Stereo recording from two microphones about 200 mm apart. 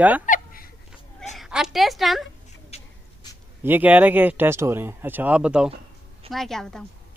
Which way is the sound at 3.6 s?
10° right (ahead or behind).